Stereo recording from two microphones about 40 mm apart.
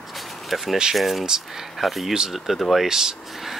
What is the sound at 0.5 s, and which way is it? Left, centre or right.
Speech, centre.